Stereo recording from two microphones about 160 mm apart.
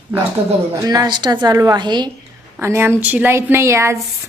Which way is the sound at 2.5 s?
15° right (ahead or behind).